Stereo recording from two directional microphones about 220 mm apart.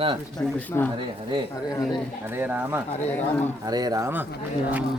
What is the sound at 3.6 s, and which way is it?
Speech, 15° right (ahead or behind).